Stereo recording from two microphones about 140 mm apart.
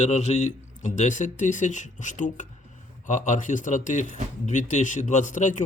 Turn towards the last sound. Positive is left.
turn(degrees=60)  # may be behind; listen again after turning